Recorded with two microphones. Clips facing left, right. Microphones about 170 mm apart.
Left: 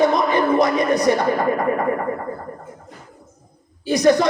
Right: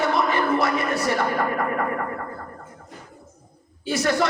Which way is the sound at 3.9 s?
15° left (ahead or behind).